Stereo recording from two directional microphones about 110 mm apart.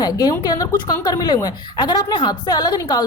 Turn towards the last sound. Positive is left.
turn(degrees=35)  # may be behind; listen again after turning